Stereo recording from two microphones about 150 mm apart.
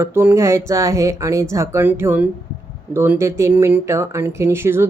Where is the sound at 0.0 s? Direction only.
15° right (ahead or behind).